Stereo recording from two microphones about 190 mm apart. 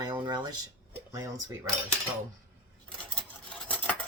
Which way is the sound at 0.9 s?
15° right (ahead or behind).